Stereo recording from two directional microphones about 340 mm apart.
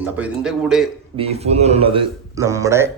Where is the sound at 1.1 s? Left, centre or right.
Centre.